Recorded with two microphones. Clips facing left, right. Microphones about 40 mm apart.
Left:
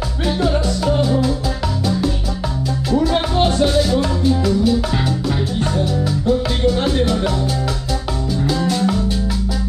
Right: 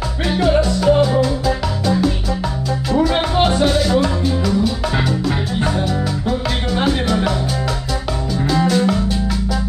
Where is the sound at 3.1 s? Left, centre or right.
Centre.